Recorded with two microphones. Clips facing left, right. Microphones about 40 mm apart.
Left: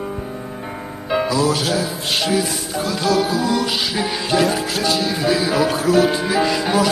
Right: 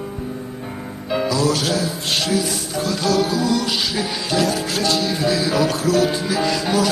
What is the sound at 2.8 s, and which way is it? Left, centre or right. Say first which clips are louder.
Music: left 1 dB; centre.